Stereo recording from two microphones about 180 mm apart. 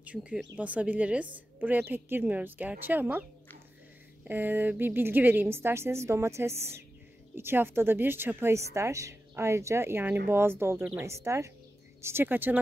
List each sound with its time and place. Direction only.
0.0 s a woman's voice: 5° right (ahead or behind)